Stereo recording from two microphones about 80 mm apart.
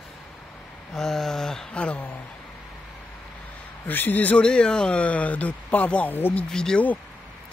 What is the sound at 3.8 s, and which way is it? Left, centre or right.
Speech, left.